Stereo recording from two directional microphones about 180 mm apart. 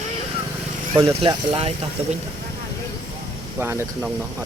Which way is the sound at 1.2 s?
30° right (ahead or behind).